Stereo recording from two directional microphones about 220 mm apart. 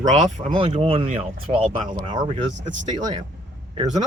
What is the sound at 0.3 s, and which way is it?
Speech, 25° right (ahead or behind).